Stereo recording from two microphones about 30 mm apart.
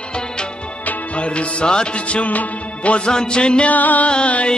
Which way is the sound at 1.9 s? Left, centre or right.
Left.